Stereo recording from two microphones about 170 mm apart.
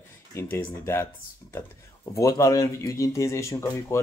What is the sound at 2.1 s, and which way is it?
Speech, 20° left (ahead or behind).